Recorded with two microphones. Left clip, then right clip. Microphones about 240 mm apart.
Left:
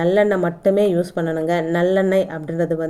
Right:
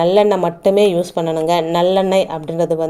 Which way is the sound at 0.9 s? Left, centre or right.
Right.